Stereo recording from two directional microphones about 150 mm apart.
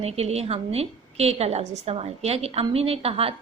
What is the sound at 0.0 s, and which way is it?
A woman's voice, 45° right (ahead or behind).